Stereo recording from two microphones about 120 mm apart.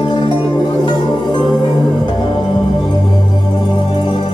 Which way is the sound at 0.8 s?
40° left (ahead or behind).